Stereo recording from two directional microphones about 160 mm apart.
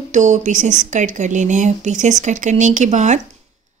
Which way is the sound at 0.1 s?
50° right (ahead or behind).